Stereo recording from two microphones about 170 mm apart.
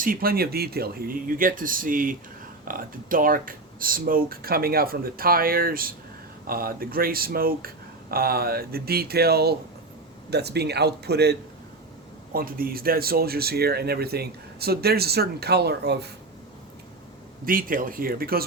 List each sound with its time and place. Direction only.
0.0 s speech: 60° right (ahead or behind)
12.3 s speech: 60° right (ahead or behind); by 16.0 s 75° right (ahead or behind)
17.4 s speech: 55° right (ahead or behind)